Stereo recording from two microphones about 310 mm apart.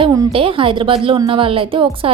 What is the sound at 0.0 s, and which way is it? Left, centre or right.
A woman's voice, centre.